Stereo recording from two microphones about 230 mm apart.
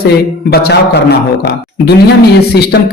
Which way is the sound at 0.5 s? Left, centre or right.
Left.